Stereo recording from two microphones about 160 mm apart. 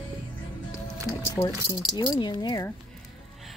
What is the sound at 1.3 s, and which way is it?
Speech, 15° left (ahead or behind).